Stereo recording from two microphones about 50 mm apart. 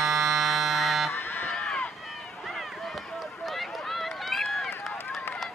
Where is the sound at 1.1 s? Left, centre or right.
Left.